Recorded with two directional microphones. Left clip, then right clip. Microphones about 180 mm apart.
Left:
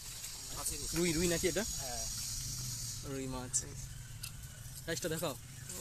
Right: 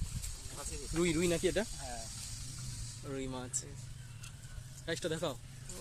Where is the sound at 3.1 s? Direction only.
5° left (ahead or behind).